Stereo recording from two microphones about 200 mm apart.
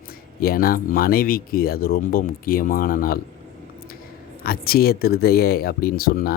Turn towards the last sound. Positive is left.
turn(degrees=50)  # may be behind; listen again after turning